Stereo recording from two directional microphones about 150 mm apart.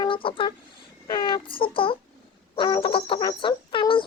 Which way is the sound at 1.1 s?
30° left (ahead or behind).